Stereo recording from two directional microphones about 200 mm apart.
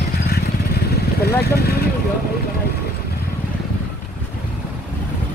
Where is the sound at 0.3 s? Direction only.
50° left (ahead or behind).